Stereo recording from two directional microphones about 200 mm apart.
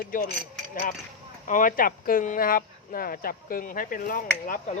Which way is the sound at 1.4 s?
40° left (ahead or behind).